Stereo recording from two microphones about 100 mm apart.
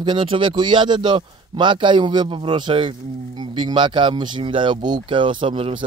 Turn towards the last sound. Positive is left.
turn(degrees=-55)  # may be behind; listen again after turning